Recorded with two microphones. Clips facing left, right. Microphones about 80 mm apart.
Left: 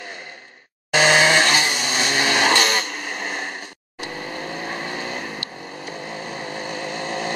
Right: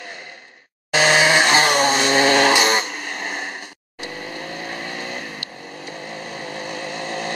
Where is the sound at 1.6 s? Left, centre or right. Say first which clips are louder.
Right 7 dB; right.